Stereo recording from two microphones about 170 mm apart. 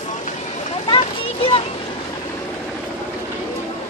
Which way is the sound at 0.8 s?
30° left (ahead or behind).